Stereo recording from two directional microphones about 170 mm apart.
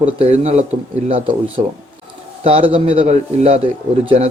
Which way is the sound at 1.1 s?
30° right (ahead or behind).